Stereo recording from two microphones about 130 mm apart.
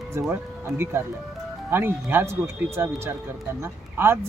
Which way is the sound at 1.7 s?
15° right (ahead or behind).